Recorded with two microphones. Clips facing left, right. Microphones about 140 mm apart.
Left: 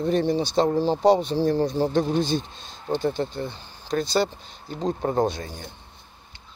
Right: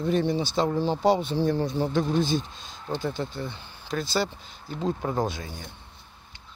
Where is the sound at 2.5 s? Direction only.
45° right (ahead or behind).